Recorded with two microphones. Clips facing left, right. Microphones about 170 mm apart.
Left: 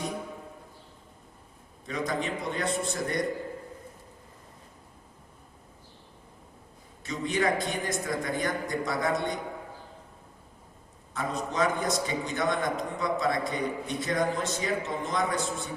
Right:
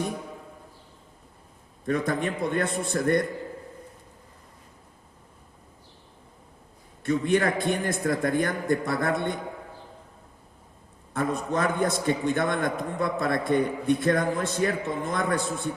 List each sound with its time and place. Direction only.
1.9 s a man's voice: 55° right (ahead or behind)
7.0 s a man's voice: 55° right (ahead or behind)
11.1 s a man's voice: 55° right (ahead or behind)